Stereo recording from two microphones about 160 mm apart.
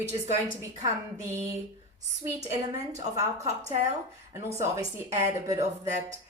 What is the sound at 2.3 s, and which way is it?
Speech, 20° right (ahead or behind).